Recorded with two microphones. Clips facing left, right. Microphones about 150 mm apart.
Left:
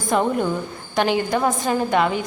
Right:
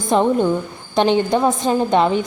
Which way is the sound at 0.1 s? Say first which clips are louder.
Right 5 dB; 25° right (ahead or behind).